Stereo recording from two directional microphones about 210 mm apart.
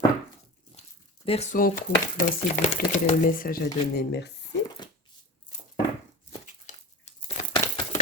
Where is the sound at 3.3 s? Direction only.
40° left (ahead or behind).